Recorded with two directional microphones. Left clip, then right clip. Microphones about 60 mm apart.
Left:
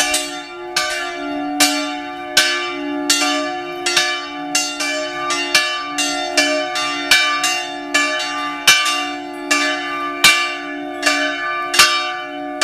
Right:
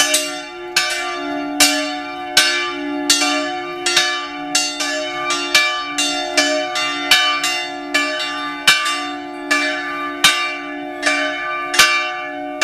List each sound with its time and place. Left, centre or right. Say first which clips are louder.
1.6 s church bell: right 2 dB; right
2.3 s church bell: right 1 dB; centre
7.1 s church bell: even; left
7.9 s church bell: left 2 dB; left